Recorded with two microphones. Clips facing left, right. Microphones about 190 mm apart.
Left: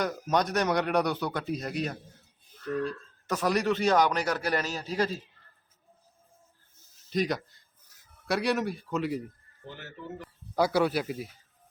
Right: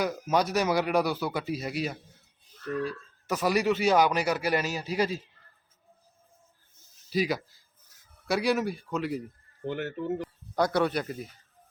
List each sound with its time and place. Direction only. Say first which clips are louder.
0.0 s speech: right 1 dB; 5° right (ahead or behind)
7.1 s speech: right 1 dB; 5° right (ahead or behind)
9.6 s speech: right 13 dB; 65° right (ahead or behind)
10.5 s speech: left 1 dB; 5° left (ahead or behind)